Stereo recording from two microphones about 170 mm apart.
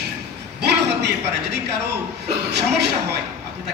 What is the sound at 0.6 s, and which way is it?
A man's voice, 80° right.